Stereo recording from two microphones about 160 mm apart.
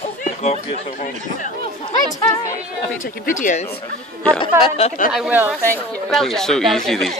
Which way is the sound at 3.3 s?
55° left (ahead or behind).